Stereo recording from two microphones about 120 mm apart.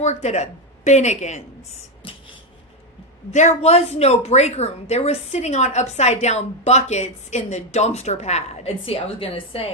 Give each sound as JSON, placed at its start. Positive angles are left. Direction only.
{"t": 0.0, "sound": "a woman's voice", "side_deg": 70}
{"t": 2.0, "sound": "a sound", "side_deg": 45}
{"t": 3.3, "sound": "a woman's voice", "side_deg": 70}